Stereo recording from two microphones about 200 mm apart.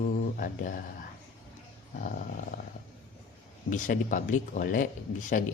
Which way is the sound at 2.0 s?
40° left (ahead or behind).